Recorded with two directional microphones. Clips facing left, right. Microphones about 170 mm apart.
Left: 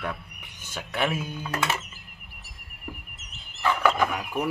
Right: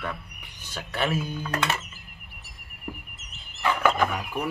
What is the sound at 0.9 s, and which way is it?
Speech, centre (ahead or behind).